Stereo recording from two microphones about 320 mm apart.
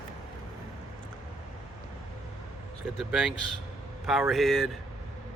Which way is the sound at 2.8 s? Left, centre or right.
Centre.